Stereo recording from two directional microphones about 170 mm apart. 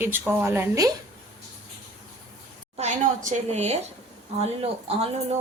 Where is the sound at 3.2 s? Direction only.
40° right (ahead or behind).